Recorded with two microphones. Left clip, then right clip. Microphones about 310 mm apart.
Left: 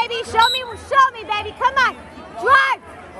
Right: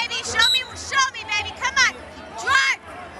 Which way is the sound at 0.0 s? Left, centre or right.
Centre.